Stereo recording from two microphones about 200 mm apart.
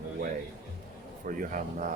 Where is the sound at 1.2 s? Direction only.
40° right (ahead or behind).